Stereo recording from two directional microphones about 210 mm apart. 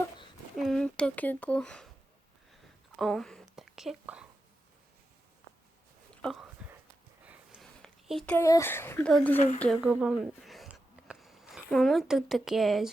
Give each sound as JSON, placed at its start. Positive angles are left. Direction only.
{"t": 0.5, "sound": "speech", "side_deg": 0}
{"t": 2.5, "sound": "whispering", "side_deg": 0}
{"t": 7.3, "sound": "a sound", "side_deg": 0}
{"t": 8.4, "sound": "speech", "side_deg": 15}